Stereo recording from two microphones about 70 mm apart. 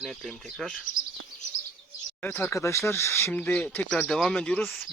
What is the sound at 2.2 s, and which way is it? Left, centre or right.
Speech, left.